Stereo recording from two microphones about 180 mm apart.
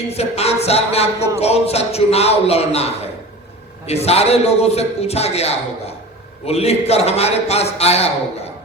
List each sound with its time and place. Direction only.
0.1 s a man's voice: 35° left (ahead or behind)